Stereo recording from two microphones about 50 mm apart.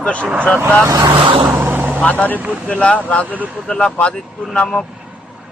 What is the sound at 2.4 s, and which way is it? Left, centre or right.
Speech, right.